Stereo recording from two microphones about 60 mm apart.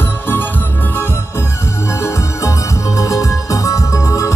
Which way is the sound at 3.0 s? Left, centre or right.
Left.